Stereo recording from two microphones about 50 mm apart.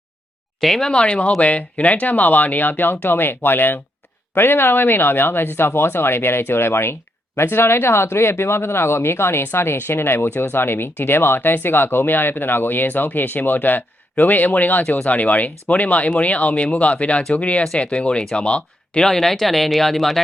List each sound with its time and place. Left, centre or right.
0.6 s speech: centre
0.9 s speech: centre
19.0 s speech: centre